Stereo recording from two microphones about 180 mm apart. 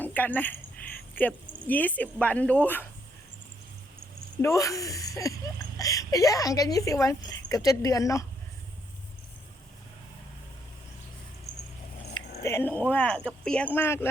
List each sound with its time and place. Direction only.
0.0 s speech: 10° left (ahead or behind)
4.4 s a woman's voice: 15° left (ahead or behind)
12.1 s speech: 15° left (ahead or behind)